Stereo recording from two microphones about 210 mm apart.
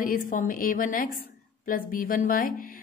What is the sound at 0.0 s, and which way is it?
A woman's voice, 40° left (ahead or behind).